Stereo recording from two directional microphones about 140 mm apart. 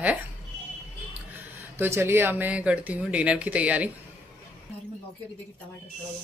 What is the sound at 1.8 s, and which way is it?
Speech, 15° right (ahead or behind).